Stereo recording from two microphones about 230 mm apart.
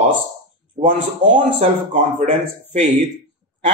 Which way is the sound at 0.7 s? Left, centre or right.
Right.